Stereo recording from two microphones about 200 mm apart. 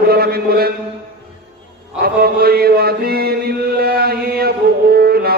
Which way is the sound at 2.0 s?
50° right (ahead or behind).